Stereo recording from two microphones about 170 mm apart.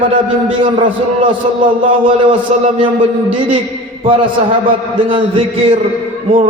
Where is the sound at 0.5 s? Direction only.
30° right (ahead or behind).